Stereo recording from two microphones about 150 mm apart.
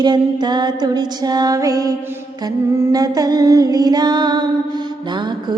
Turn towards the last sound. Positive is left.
turn(degrees=-30)  # may be behind; listen again after turning